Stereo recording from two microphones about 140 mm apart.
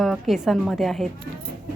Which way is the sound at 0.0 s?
Centre (ahead or behind).